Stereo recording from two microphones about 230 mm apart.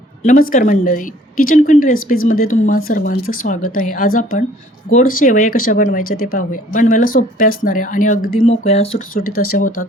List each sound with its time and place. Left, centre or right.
0.2 s speech: left
9.1 s speech: left